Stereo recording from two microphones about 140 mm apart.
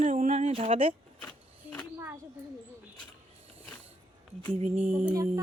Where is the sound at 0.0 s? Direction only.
55° right (ahead or behind).